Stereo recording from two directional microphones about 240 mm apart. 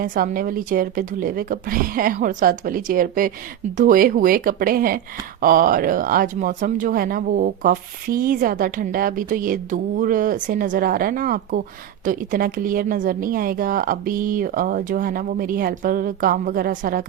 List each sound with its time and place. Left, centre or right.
0.0 s speech: right